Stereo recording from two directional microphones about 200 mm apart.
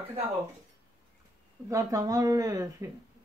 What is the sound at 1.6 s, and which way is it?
Speech, 15° right (ahead or behind).